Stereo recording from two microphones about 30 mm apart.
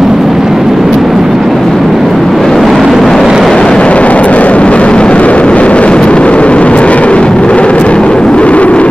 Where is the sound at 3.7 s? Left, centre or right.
Left.